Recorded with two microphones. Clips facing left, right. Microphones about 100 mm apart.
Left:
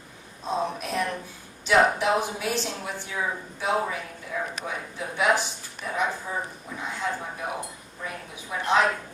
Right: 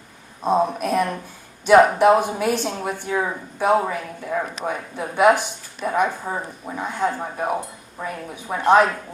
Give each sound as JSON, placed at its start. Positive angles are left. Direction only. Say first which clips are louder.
{"t": 0.4, "sound": "a woman's voice", "louder": "right 9 dB", "side_deg": -55}